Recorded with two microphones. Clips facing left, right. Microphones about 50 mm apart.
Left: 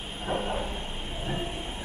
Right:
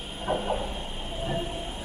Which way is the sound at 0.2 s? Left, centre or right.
Centre.